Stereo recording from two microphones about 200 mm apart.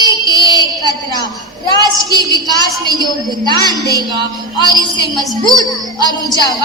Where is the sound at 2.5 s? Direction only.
20° left (ahead or behind).